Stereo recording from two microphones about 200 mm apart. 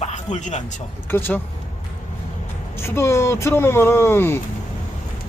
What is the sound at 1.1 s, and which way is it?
Speech, 10° left (ahead or behind).